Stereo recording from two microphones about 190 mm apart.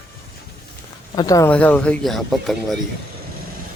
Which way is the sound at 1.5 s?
5° left (ahead or behind).